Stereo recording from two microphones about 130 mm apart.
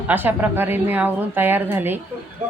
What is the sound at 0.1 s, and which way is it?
Speech, 15° right (ahead or behind).